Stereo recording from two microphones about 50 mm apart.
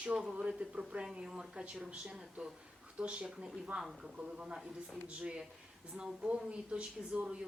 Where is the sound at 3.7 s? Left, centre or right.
Centre.